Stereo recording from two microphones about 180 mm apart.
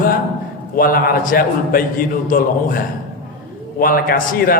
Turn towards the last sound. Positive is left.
turn(degrees=55)  # may be behind; listen again after turning